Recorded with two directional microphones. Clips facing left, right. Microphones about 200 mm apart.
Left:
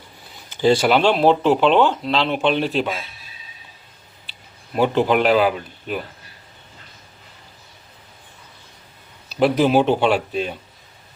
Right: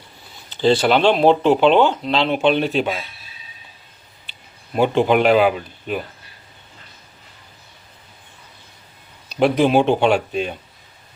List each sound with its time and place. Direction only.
0.5 s speech: 10° left (ahead or behind)
4.7 s speech: centre (ahead or behind)
9.3 s speech: 5° left (ahead or behind)